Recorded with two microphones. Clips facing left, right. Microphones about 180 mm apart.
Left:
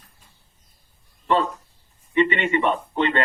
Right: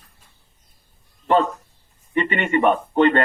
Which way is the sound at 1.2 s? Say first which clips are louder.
Right 3 dB; 50° right (ahead or behind).